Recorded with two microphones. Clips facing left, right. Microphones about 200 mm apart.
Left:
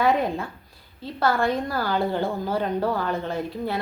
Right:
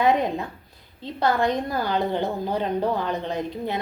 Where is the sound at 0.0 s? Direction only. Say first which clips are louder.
Right 1 dB; 20° right (ahead or behind).